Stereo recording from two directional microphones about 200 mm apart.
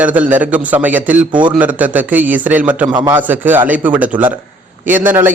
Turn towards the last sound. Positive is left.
turn(degrees=-10)  # may be behind; listen again after turning